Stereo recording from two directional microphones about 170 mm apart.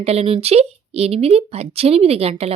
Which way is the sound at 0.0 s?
35° right (ahead or behind).